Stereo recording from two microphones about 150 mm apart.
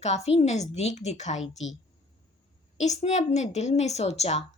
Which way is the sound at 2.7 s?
50° left (ahead or behind).